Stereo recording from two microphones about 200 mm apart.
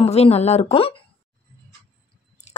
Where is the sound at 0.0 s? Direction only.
30° left (ahead or behind).